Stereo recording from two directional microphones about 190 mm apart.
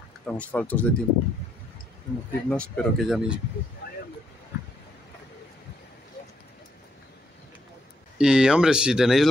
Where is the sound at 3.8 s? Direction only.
55° left (ahead or behind).